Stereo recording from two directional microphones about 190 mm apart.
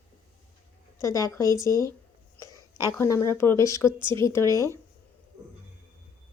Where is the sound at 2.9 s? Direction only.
15° left (ahead or behind).